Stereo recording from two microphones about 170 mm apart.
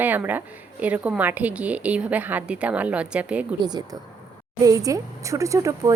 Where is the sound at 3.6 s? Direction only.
25° right (ahead or behind).